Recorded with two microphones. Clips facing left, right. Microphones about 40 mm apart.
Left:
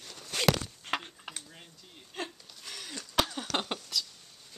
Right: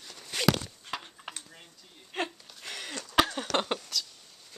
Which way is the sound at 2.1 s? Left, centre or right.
Right.